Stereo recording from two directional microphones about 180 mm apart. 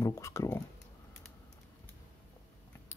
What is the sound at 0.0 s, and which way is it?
Speech, 15° left (ahead or behind).